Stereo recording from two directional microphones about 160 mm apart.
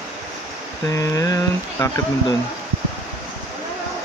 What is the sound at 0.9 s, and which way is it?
Speech, 20° left (ahead or behind).